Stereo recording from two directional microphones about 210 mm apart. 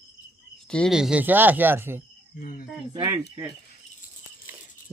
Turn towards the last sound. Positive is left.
turn(degrees=-10)  # may be behind; listen again after turning